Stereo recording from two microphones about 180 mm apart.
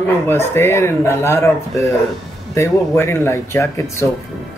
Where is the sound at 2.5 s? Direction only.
15° left (ahead or behind).